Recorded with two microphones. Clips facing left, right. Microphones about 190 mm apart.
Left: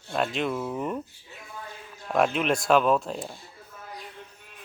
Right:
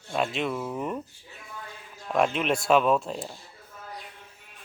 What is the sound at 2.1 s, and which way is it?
A man's voice, centre (ahead or behind).